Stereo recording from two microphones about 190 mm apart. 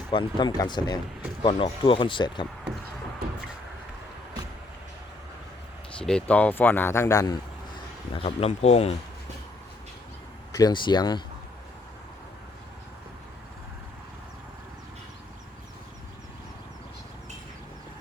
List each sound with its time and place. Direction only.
0.1 s speech: 25° left (ahead or behind)
6.0 s speech: 5° left (ahead or behind)
8.1 s speech: 30° left (ahead or behind)
10.5 s speech: 20° left (ahead or behind)